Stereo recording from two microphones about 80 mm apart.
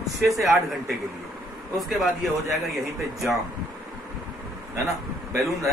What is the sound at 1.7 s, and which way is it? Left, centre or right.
Speech, centre.